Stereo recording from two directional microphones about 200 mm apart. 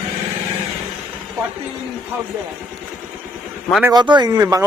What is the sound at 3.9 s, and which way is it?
Speech, 20° right (ahead or behind).